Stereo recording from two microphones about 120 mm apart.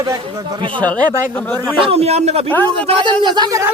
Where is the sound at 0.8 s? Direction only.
10° left (ahead or behind).